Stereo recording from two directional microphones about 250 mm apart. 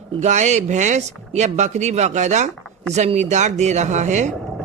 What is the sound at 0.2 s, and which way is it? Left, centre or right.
Speech, right.